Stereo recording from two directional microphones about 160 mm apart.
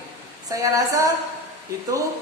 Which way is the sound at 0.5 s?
20° right (ahead or behind).